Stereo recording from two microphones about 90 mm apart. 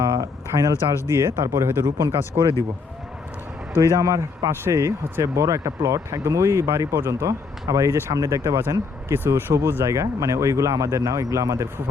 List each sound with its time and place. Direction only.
0.0 s a sound: 35° right (ahead or behind)
1.1 s speech: 30° right (ahead or behind)
2.3 s speech: 50° right (ahead or behind)
3.9 s speech: 40° right (ahead or behind)